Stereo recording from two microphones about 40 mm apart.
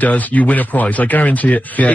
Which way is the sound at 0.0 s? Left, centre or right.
Left.